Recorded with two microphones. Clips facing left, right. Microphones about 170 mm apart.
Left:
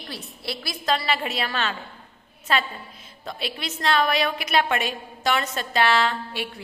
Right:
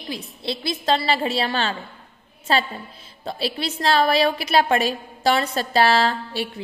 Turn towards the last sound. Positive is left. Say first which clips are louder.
# right 3 dB
turn(degrees=-35)  # may be behind; listen again after turning